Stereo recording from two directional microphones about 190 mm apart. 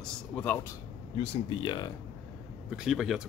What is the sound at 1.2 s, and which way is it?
Speech, 25° left (ahead or behind).